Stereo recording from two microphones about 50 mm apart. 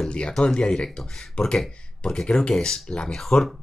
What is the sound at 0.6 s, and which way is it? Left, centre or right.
Speech, centre.